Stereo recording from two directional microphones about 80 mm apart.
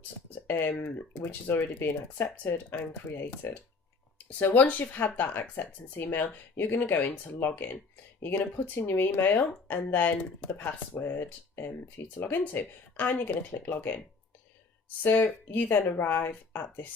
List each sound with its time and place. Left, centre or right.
0.4 s speech: left
15.0 s speech: left